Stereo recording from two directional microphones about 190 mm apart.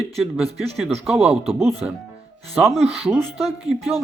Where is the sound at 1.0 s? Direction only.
5° right (ahead or behind).